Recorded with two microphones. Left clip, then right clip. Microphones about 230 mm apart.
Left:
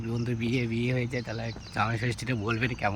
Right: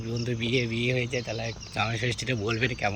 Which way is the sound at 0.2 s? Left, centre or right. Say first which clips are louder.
Right 4 dB; centre.